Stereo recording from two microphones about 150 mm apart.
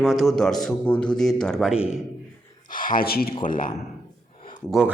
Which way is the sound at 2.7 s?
65° left (ahead or behind).